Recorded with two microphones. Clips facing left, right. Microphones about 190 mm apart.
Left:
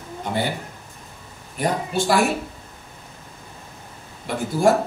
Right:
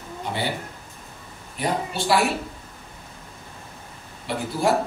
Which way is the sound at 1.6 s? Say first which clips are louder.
Left 3 dB; 45° left (ahead or behind).